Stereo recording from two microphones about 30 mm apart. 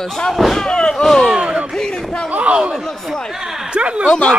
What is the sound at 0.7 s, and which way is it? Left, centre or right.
Speech, left.